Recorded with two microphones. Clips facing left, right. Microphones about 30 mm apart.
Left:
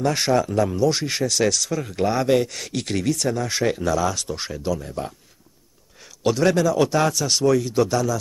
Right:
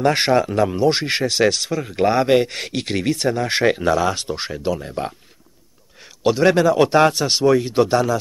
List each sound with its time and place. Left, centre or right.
0.0 s speech: right
1.7 s speech: centre
2.0 s speech: right
5.9 s speech: right